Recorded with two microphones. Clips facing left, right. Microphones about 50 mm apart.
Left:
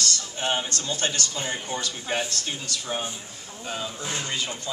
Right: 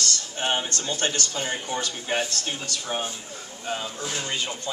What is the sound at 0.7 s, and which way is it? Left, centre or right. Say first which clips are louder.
Speech: right 1 dB; right.